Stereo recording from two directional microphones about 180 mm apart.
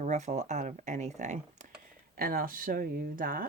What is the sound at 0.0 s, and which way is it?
Speech, 40° right (ahead or behind).